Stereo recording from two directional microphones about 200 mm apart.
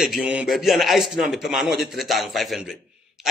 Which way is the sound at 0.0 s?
5° right (ahead or behind).